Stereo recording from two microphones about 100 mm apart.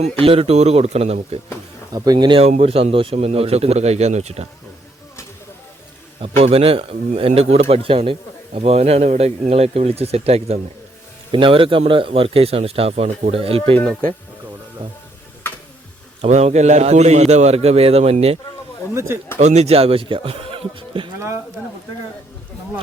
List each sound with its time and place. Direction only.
0.0 s a man's voice: 75° right (ahead or behind); by 1.4 s 90° right
1.9 s speech: 40° right (ahead or behind)
2.4 s a man's voice: 80° right
6.2 s a man's voice: 75° right (ahead or behind)
8.5 s a man's voice: 90° right
11.3 s a man's voice: 55° right (ahead or behind); by 13.7 s 75° right (ahead or behind)
16.2 s a man's voice: 90° right
18.9 s speech: 25° right (ahead or behind)
19.5 s speech: 85° right; by 21.1 s 60° right (ahead or behind)